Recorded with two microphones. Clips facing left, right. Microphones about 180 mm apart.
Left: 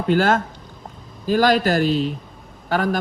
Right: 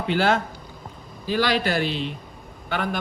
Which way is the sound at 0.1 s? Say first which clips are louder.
Left 4 dB; 45° left (ahead or behind).